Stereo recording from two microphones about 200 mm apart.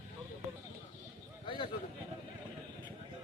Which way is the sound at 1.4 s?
25° left (ahead or behind).